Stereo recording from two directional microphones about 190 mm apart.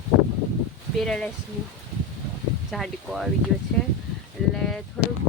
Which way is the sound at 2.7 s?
Centre (ahead or behind).